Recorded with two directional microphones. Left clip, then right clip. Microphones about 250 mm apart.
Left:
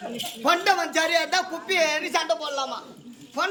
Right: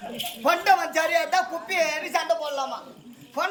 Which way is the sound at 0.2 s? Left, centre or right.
Centre.